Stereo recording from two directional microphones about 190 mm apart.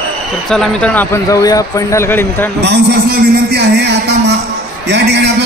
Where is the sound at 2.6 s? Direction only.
60° right (ahead or behind).